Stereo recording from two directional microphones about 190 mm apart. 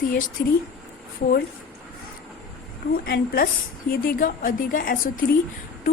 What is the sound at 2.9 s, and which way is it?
A woman's voice, 50° left (ahead or behind).